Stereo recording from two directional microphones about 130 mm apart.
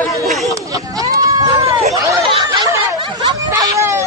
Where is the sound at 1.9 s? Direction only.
25° right (ahead or behind).